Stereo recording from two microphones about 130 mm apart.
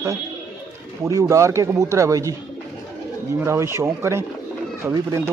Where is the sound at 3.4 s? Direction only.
20° right (ahead or behind).